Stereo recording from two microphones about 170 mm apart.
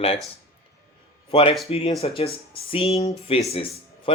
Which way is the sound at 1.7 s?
35° left (ahead or behind).